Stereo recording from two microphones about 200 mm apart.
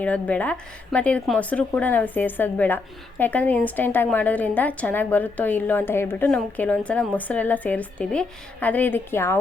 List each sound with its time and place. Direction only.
0.0 s speech: 5° left (ahead or behind)